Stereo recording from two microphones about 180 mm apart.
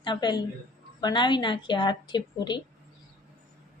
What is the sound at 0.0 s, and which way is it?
A woman's voice, 25° left (ahead or behind).